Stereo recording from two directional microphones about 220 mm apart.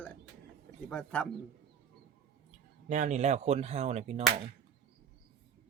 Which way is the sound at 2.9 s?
35° right (ahead or behind).